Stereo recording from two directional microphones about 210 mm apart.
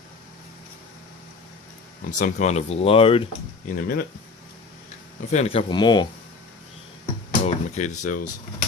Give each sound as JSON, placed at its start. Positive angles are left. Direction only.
{"t": 2.0, "sound": "speech", "side_deg": 35}
{"t": 3.7, "sound": "speech", "side_deg": 40}
{"t": 5.3, "sound": "speech", "side_deg": 30}
{"t": 7.3, "sound": "speech", "side_deg": 35}